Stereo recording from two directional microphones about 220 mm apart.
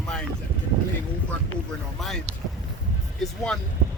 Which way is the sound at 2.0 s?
Centre (ahead or behind).